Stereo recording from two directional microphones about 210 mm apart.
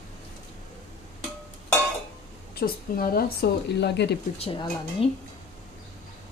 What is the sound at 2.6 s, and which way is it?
Speech, 45° left (ahead or behind).